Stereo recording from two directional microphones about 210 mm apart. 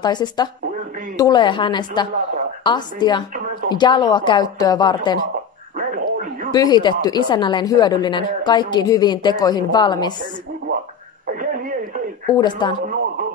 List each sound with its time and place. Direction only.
0.0 s a woman's voice: 20° left (ahead or behind)
5.8 s dog: 40° right (ahead or behind)
6.5 s a woman's voice: 20° left (ahead or behind)
11.2 s radio: 40° right (ahead or behind)
12.3 s a woman's voice: 20° left (ahead or behind)